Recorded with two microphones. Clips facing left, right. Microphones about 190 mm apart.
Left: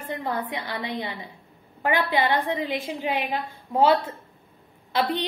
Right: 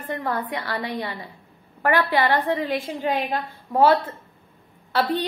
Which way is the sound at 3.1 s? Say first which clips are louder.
Right 3 dB; 45° right (ahead or behind).